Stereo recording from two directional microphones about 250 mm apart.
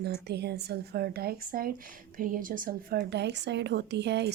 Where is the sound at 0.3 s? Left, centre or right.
Right.